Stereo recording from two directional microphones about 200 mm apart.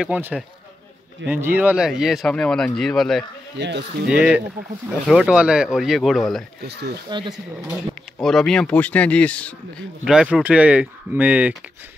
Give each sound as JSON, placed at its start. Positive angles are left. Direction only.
{"t": 0.0, "sound": "speech", "side_deg": -5}
{"t": 3.5, "sound": "speech", "side_deg": -60}
{"t": 4.1, "sound": "speech", "side_deg": -5}
{"t": 6.6, "sound": "speech", "side_deg": -55}
{"t": 7.1, "sound": "speech", "side_deg": -20}
{"t": 7.7, "sound": "speech", "side_deg": 0}